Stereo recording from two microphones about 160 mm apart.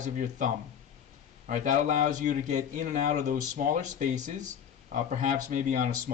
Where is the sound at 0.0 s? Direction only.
50° right (ahead or behind).